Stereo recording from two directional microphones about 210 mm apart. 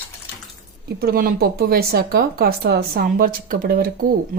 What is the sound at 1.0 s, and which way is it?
Speech, 45° right (ahead or behind).